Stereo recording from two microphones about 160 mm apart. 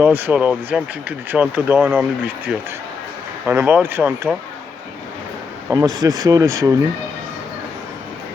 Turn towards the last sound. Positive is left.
turn(degrees=-20)  # may be behind; listen again after turning